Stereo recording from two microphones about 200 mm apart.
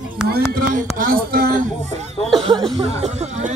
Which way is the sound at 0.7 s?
45° right (ahead or behind).